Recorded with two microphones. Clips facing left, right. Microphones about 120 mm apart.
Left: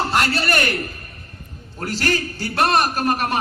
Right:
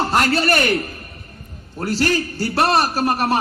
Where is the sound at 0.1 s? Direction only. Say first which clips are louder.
Right 3 dB; 35° right (ahead or behind).